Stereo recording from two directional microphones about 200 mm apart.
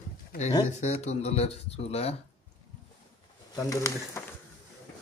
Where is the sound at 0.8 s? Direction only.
35° left (ahead or behind).